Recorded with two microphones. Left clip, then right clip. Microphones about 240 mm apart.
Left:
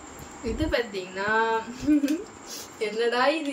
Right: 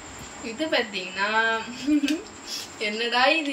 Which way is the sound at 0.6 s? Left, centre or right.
Centre.